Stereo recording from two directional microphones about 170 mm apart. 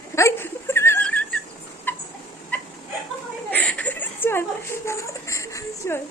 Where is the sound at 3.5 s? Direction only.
10° left (ahead or behind).